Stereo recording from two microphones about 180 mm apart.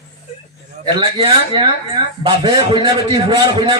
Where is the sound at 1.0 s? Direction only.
30° right (ahead or behind).